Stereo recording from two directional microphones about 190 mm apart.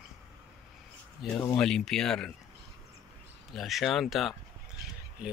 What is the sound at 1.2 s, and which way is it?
Speech, centre (ahead or behind).